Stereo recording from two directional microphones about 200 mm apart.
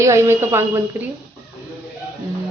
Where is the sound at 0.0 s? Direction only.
15° right (ahead or behind).